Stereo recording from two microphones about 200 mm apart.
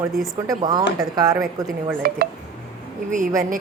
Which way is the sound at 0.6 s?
20° right (ahead or behind).